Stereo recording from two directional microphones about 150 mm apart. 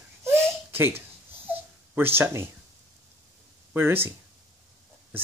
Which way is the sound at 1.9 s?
15° right (ahead or behind).